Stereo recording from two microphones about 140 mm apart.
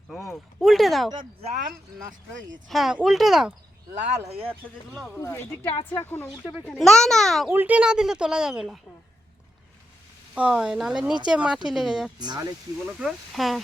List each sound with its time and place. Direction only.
0.6 s speech: centre (ahead or behind)
2.6 s speech: centre (ahead or behind)
4.3 s speech: 45° right (ahead or behind)
5.2 s a woman's voice: 20° left (ahead or behind)
6.7 s speech: 5° left (ahead or behind)
7.5 s speech: 10° right (ahead or behind)
10.3 s speech: 5° right (ahead or behind)
12.2 s speech: 30° right (ahead or behind)
12.8 s speech: 5° right (ahead or behind)